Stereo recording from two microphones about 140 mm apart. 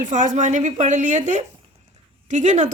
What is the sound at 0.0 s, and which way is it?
A woman's voice, 65° right (ahead or behind).